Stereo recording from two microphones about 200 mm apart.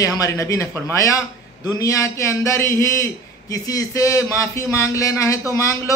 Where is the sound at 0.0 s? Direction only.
15° left (ahead or behind).